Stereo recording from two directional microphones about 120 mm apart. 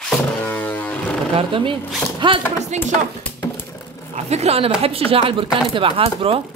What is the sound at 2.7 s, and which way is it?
Speech, 75° right (ahead or behind).